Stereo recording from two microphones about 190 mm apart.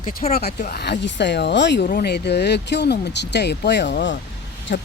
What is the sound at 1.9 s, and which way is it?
Speech, 55° left (ahead or behind).